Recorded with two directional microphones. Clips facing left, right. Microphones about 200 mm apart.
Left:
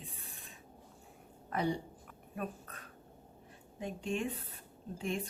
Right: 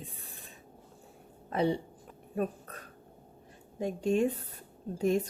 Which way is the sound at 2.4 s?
40° right (ahead or behind).